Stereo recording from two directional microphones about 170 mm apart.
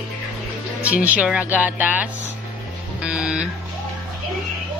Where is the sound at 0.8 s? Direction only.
10° right (ahead or behind).